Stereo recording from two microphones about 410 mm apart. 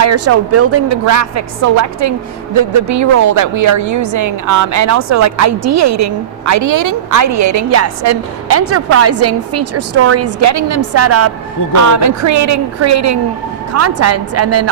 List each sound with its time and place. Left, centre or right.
0.0 s speech: right